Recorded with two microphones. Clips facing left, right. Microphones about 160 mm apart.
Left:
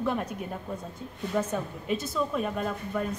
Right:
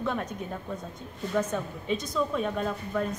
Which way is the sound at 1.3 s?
5° left (ahead or behind).